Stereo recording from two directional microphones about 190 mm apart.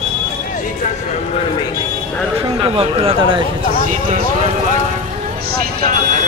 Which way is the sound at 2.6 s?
30° right (ahead or behind).